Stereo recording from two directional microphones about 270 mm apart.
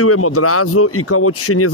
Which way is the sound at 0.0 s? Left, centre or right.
Left.